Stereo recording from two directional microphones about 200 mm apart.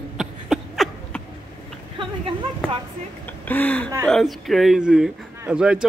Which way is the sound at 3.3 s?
10° left (ahead or behind).